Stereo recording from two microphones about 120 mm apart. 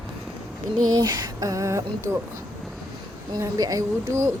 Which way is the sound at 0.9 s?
35° right (ahead or behind).